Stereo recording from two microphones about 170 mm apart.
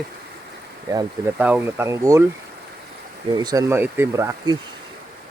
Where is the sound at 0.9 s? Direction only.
20° right (ahead or behind).